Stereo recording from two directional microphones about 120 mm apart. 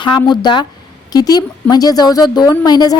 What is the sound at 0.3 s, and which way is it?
A woman's voice, 40° left (ahead or behind).